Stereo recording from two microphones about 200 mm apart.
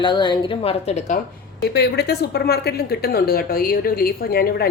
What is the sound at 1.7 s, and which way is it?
Speech, 55° left (ahead or behind).